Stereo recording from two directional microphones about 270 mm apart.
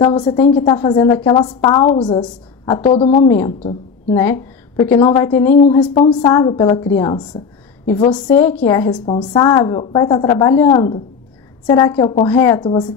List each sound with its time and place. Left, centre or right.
0.0 s a woman's voice: centre
4.2 s a woman's voice: centre
5.6 s a woman's voice: left
8.4 s a woman's voice: centre